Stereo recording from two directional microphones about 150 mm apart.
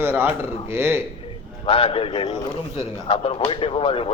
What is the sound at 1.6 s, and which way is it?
Speech, 40° left (ahead or behind).